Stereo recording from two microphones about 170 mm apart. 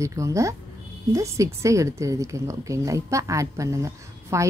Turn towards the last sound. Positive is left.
turn(degrees=-20)  # may be behind; listen again after turning